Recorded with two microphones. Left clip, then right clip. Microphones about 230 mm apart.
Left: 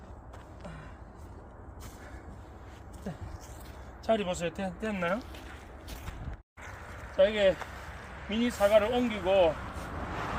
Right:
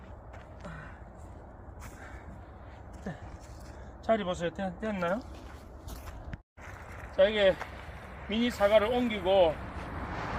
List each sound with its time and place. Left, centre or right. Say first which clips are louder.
4.0 s speech: even; centre
7.2 s speech: even; centre
10.1 s vehicle: left 1 dB; left